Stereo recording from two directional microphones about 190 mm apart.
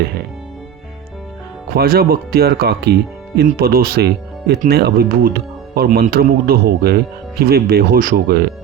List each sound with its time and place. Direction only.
1.7 s speech: 55° right (ahead or behind)